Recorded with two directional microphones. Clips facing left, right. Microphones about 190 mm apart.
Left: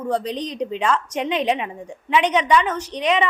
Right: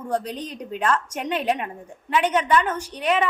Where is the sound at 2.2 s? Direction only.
10° right (ahead or behind).